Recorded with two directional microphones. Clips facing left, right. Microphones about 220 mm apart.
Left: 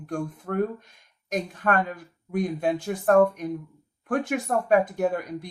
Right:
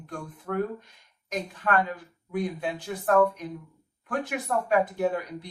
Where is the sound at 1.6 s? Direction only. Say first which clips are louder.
Even; 50° left (ahead or behind).